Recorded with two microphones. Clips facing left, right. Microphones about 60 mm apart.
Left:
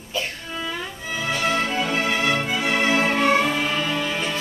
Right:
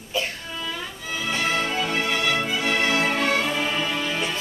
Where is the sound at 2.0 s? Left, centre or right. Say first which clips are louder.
Left 2 dB; centre.